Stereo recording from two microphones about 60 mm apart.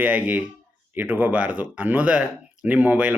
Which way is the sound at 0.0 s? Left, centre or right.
Right.